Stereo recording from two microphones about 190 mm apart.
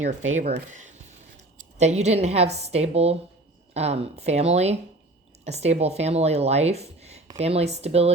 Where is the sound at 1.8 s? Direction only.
35° right (ahead or behind).